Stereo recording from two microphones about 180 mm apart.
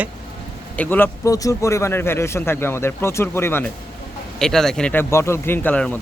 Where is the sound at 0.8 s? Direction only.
10° left (ahead or behind).